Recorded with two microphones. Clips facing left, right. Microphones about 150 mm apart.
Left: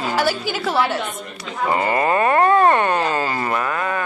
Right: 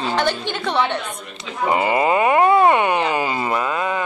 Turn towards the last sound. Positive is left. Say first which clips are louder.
# right 1 dB
turn(degrees=-15)  # may be behind; listen again after turning